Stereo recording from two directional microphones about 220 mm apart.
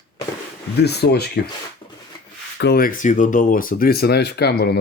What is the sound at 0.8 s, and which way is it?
Speech, 50° left (ahead or behind).